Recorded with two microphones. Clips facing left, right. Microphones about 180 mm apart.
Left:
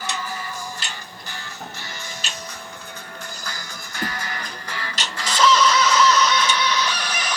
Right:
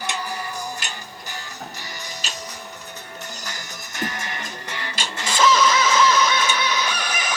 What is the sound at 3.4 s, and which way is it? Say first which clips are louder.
Music: even; 20° right (ahead or behind).